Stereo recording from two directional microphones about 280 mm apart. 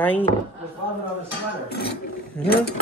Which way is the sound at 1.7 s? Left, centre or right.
Left.